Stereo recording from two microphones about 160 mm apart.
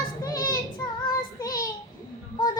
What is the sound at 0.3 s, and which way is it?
Child singing, 20° left (ahead or behind).